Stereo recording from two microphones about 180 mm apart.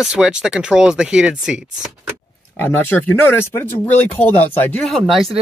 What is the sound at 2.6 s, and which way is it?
Speech, 10° left (ahead or behind).